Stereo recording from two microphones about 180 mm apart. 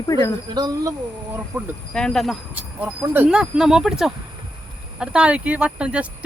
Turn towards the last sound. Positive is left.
turn(degrees=-5)  # may be behind; listen again after turning